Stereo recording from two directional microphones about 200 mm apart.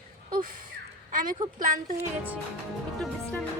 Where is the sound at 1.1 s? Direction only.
45° right (ahead or behind).